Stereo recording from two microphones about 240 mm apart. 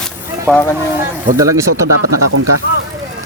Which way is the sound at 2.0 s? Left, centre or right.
Right.